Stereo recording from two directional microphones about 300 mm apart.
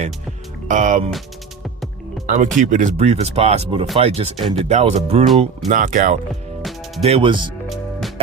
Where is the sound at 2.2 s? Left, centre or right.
Right.